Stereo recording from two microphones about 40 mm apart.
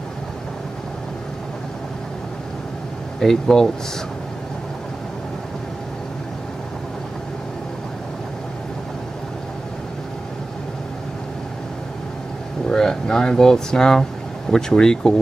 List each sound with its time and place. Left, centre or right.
3.2 s speech: centre
12.6 s speech: centre